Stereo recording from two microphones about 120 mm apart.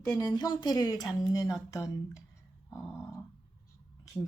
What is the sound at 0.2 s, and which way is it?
A woman's voice, 35° left (ahead or behind).